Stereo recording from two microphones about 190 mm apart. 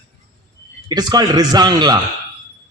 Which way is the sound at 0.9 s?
20° right (ahead or behind).